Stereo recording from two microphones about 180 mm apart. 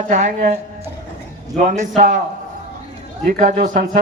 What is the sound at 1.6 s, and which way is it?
Speech, 40° right (ahead or behind).